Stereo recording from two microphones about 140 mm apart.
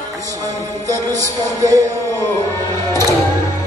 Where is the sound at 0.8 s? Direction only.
25° right (ahead or behind).